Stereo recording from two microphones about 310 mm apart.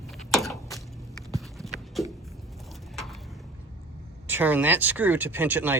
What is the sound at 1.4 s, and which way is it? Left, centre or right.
Clip-clop, centre.